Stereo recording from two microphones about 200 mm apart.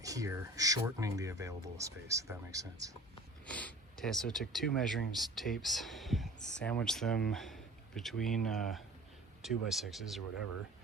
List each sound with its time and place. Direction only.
0.0 s speech: 15° right (ahead or behind)
3.4 s speech: 5° left (ahead or behind)